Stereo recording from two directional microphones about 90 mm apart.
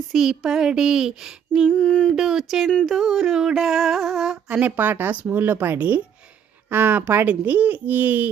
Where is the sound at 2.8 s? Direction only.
Centre (ahead or behind); by 8.3 s 20° right (ahead or behind).